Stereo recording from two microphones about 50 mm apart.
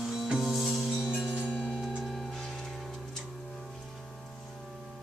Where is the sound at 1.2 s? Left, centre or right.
Centre.